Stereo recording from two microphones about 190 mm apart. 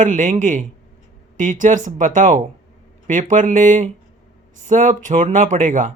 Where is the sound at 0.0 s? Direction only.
45° right (ahead or behind).